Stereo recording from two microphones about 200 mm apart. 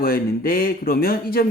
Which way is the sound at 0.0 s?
45° left (ahead or behind).